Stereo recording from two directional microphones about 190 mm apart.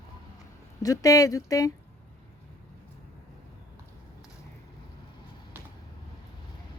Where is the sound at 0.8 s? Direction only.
20° left (ahead or behind).